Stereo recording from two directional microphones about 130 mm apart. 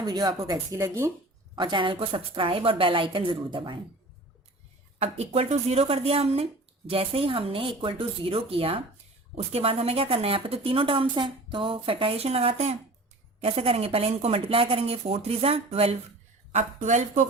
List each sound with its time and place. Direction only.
0.0 s a woman's voice: 30° right (ahead or behind)
1.5 s a woman's voice: 40° right (ahead or behind)
4.9 s speech: 55° right (ahead or behind)
16.5 s speech: 65° right (ahead or behind)